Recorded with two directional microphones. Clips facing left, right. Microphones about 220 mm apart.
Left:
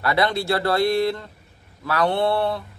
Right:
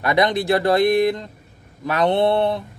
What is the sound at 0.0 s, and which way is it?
Speech, 20° right (ahead or behind).